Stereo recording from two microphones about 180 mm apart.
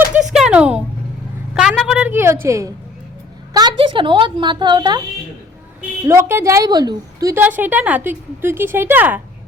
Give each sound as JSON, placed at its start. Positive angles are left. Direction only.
{"t": 0.3, "sound": "a sound", "side_deg": -5}
{"t": 3.5, "sound": "speech", "side_deg": -25}
{"t": 6.1, "sound": "a woman's voice", "side_deg": -15}